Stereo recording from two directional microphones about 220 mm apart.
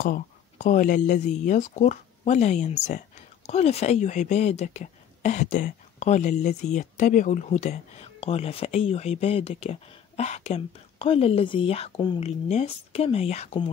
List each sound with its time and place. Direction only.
0.0 s speech: 35° left (ahead or behind)